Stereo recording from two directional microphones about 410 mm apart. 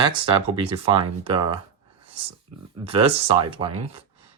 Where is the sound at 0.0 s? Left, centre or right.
Centre.